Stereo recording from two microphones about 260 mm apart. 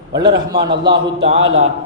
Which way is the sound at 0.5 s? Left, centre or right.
Centre.